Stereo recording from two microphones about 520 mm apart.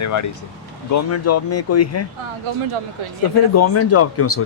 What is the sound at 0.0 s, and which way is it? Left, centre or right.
Speech, left.